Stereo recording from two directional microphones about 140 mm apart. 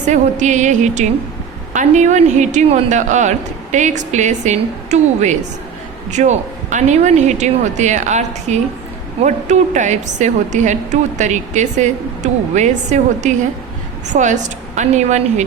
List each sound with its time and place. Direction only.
0.1 s a woman's voice: 60° right (ahead or behind)